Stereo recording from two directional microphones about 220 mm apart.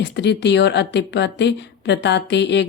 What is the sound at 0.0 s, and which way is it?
A woman's voice, 50° left (ahead or behind).